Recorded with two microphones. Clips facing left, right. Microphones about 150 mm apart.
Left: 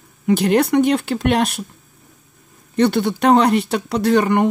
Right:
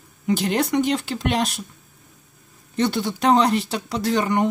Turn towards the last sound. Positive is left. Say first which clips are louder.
# left 5 dB
turn(degrees=60)  # may be behind; listen again after turning